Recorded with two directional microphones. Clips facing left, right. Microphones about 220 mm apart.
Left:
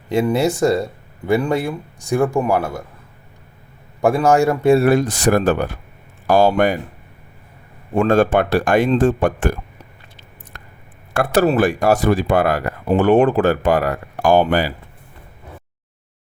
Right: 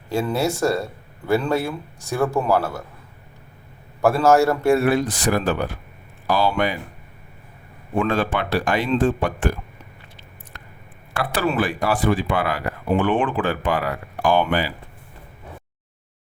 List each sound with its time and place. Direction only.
0.1 s speech: 15° left (ahead or behind)
4.0 s speech: 15° left (ahead or behind)
4.8 s speech: 45° left (ahead or behind)
7.9 s speech: 45° left (ahead or behind)
11.1 s speech: 45° left (ahead or behind)